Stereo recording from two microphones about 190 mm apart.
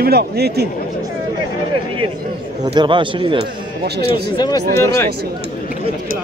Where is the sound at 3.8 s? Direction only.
55° right (ahead or behind).